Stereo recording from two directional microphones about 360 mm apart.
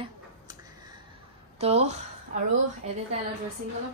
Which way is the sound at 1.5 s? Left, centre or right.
Centre.